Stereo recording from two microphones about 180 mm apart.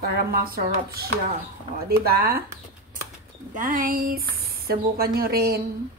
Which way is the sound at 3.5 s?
50° right (ahead or behind).